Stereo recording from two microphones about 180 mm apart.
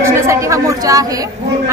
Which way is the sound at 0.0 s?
15° right (ahead or behind).